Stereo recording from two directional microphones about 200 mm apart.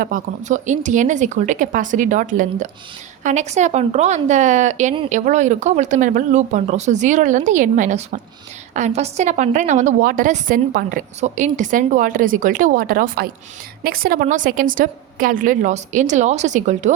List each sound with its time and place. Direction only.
0.0 s a woman's voice: 40° right (ahead or behind)